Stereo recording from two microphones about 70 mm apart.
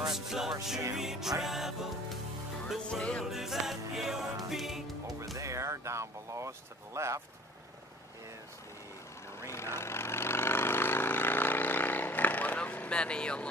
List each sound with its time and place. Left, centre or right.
0.0 s music: centre
2.9 s music: centre
3.3 s music: centre
5.2 s speech: right
9.5 s vehicle: left; by 13.5 s centre